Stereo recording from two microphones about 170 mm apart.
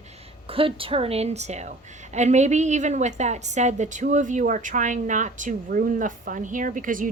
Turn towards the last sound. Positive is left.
turn(degrees=-50)  # may be behind; listen again after turning